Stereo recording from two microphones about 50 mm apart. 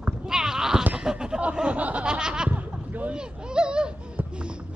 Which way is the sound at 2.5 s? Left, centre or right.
Right.